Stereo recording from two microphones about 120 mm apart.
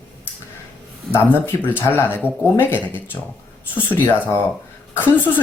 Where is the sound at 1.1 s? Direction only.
15° left (ahead or behind).